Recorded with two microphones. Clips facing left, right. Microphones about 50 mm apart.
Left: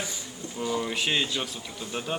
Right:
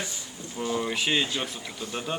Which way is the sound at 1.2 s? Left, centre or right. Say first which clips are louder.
Even; right.